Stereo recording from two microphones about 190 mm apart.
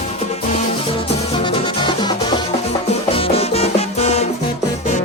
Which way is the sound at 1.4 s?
25° left (ahead or behind).